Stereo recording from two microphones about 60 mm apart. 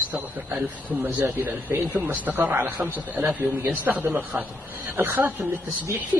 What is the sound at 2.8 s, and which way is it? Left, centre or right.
Speech, right.